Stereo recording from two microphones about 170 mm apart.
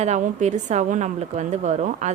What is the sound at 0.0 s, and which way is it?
A woman's voice, 40° right (ahead or behind).